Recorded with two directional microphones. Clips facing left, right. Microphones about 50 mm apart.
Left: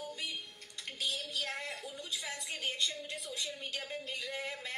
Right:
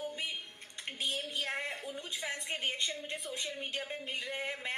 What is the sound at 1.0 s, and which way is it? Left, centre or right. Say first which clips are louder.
A woman's voice: right 1 dB; right.